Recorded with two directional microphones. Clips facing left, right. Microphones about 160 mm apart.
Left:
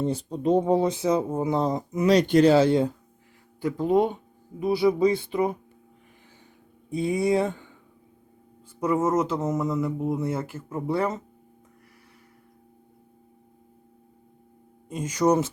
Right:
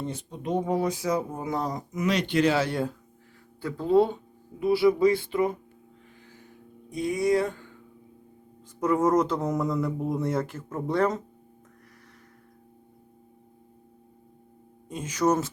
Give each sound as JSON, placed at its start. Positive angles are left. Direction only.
{"t": 0.0, "sound": "speech", "side_deg": 35}
{"t": 7.0, "sound": "speech", "side_deg": 25}
{"t": 8.8, "sound": "speech", "side_deg": 5}
{"t": 14.8, "sound": "speech", "side_deg": 10}